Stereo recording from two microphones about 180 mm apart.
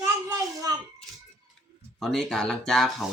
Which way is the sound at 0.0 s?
20° right (ahead or behind).